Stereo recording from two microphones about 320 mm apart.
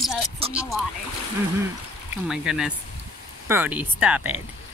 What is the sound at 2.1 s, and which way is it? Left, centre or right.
Speech, centre.